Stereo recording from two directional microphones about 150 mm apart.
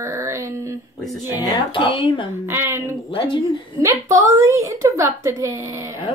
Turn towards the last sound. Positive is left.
turn(degrees=-20)  # may be behind; listen again after turning